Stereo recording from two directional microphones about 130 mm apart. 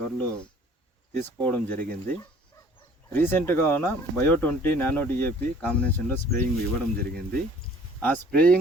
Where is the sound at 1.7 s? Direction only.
90° right.